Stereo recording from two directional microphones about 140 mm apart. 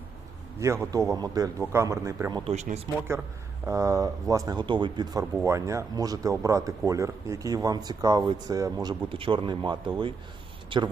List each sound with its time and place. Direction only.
0.6 s speech: 20° right (ahead or behind)
2.5 s speech: 55° right (ahead or behind)
3.7 s speech: 25° right (ahead or behind)
5.5 s speech: 20° right (ahead or behind)